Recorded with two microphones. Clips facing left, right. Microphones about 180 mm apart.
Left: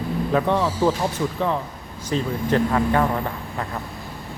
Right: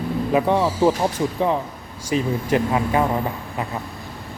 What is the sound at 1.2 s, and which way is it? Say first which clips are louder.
Speech: right 2 dB; 25° right (ahead or behind).